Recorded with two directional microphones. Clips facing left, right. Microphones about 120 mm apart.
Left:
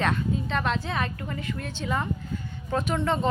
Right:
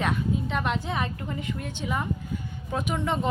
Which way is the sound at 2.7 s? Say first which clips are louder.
Left 2 dB; 10° right (ahead or behind).